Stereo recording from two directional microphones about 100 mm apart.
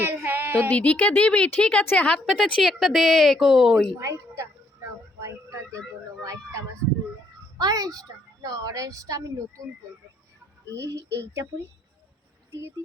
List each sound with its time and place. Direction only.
0.0 s a sound: 20° right (ahead or behind)
0.7 s speech: 15° left (ahead or behind)
2.6 s a woman's voice: centre (ahead or behind)
4.0 s a sound: 30° right (ahead or behind)
7.6 s a woman's voice: 35° right (ahead or behind)
10.8 s speech: 30° right (ahead or behind)